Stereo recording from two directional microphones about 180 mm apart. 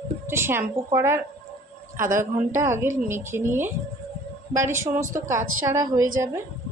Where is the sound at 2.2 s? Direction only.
15° right (ahead or behind).